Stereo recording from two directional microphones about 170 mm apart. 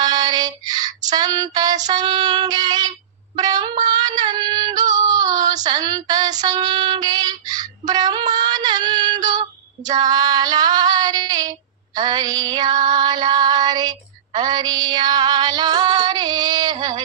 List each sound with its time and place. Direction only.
0.0 s child singing: 25° right (ahead or behind)
3.3 s female singing: 25° right (ahead or behind)